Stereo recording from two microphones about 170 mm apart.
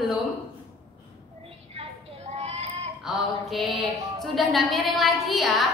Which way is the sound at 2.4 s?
40° right (ahead or behind).